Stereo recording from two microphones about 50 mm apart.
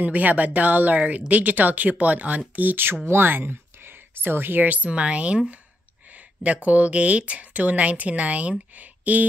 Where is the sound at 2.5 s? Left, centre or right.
Right.